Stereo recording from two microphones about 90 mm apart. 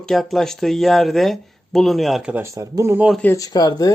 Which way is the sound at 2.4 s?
30° right (ahead or behind).